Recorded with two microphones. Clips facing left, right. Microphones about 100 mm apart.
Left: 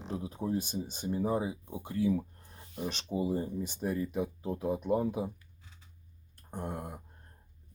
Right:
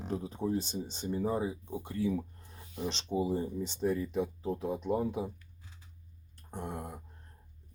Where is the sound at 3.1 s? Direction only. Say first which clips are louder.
Right 2 dB; 10° right (ahead or behind).